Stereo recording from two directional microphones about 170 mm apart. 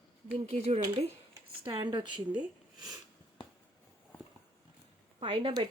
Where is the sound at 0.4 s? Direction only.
45° right (ahead or behind).